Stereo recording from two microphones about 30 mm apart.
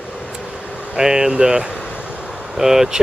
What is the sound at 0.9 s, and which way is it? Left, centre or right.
Speech, right.